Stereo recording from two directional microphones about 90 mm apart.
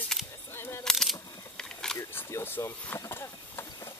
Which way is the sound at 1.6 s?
5° left (ahead or behind).